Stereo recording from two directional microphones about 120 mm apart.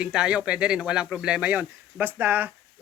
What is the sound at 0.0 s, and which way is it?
Speech, 10° right (ahead or behind).